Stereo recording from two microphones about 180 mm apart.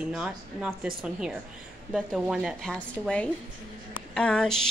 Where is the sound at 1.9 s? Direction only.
Centre (ahead or behind).